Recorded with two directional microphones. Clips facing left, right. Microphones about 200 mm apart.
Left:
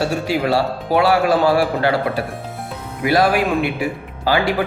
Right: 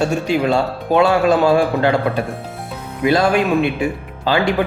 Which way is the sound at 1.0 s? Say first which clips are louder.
Right 2 dB; 25° right (ahead or behind).